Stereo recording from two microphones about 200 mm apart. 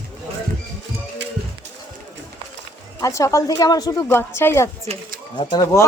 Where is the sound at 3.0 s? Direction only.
15° left (ahead or behind).